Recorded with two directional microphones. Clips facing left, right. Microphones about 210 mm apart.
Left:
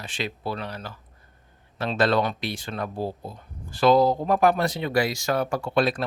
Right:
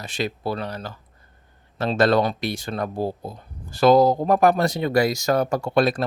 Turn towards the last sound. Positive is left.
turn(degrees=-45)  # may be behind; listen again after turning